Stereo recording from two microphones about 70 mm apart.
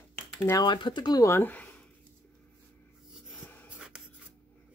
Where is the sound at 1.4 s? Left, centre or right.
Left.